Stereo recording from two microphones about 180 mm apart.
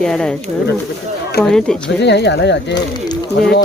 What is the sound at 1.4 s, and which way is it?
Speech, 5° left (ahead or behind).